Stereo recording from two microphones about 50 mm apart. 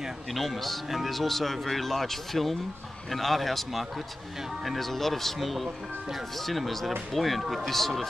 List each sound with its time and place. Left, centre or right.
0.3 s speech: centre